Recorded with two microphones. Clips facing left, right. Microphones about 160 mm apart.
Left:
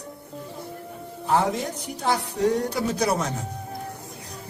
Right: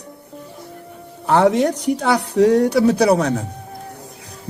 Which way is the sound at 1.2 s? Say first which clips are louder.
Right 9 dB; 70° right (ahead or behind).